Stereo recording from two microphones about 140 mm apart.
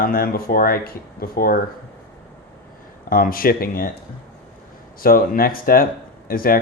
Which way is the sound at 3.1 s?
90° left.